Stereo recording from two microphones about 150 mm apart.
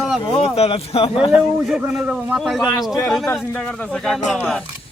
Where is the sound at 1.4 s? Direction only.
Centre (ahead or behind).